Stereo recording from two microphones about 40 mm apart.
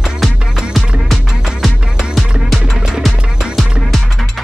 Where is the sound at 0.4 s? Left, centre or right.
Right.